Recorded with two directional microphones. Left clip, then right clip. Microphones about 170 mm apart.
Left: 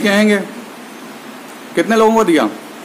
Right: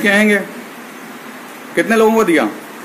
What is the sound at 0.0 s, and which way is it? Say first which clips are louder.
Speech: right 1 dB; 15° left (ahead or behind).